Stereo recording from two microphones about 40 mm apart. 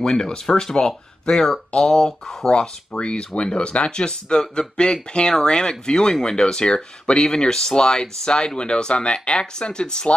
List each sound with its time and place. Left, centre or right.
0.0 s speech: centre
2.5 s speech: left